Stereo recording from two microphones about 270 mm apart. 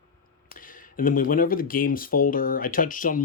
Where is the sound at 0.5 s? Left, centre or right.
Left.